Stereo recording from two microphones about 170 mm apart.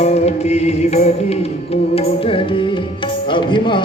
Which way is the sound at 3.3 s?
30° left (ahead or behind).